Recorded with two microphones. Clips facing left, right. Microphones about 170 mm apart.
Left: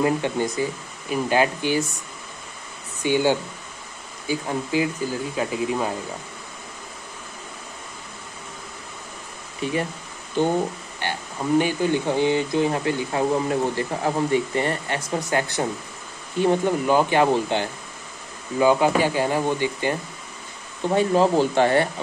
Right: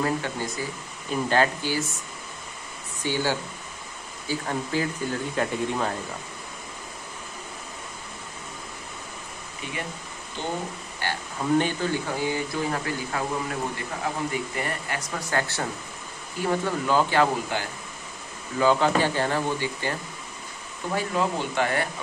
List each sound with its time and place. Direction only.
0.0 s speech: 20° left (ahead or behind)
3.0 s speech: 15° left (ahead or behind)
9.6 s speech: 30° left (ahead or behind)
10.4 s speech: 50° left (ahead or behind)
11.0 s speech: 15° left (ahead or behind)
20.9 s speech: 35° left (ahead or behind)